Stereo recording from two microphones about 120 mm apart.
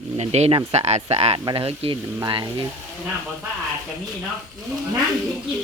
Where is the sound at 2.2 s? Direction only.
40° right (ahead or behind).